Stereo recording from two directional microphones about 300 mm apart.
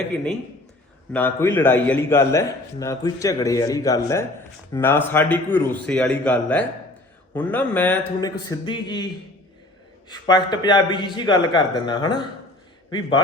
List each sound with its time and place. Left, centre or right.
1.1 s a man's voice: centre
10.1 s a man's voice: centre